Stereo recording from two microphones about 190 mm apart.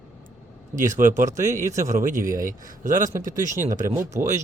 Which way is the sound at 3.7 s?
15° right (ahead or behind).